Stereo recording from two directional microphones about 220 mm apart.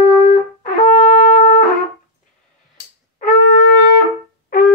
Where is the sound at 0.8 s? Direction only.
35° left (ahead or behind).